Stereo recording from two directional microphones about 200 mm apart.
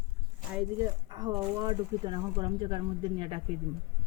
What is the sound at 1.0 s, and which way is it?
Speech, 20° right (ahead or behind).